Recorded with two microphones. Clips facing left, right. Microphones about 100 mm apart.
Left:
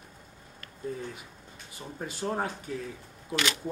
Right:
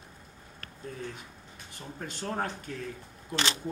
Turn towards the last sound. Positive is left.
turn(degrees=-30)  # may be behind; listen again after turning